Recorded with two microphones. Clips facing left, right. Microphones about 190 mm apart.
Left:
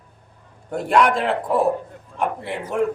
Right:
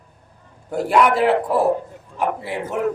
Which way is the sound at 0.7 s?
5° right (ahead or behind).